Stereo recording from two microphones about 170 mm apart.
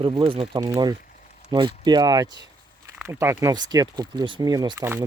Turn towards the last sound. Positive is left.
turn(degrees=-15)  # may be behind; listen again after turning